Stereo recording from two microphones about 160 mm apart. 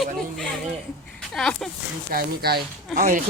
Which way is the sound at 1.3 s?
5° left (ahead or behind).